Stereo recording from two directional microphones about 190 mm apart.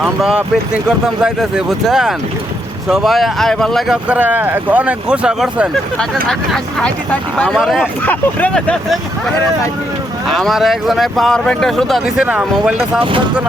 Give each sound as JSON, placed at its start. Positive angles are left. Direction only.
{"t": 0.0, "sound": "speech", "side_deg": -5}
{"t": 8.0, "sound": "speech", "side_deg": 10}
{"t": 10.3, "sound": "speech", "side_deg": 0}
{"t": 13.0, "sound": "speech", "side_deg": -25}